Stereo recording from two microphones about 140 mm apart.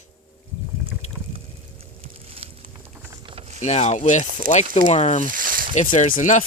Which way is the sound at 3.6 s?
55° left (ahead or behind).